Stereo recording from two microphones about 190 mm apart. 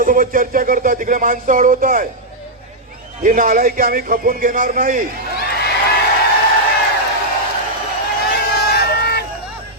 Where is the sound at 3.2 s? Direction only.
45° right (ahead or behind).